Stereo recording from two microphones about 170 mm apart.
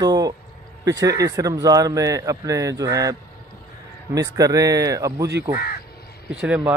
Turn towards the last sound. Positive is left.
turn(degrees=-5)  # may be behind; listen again after turning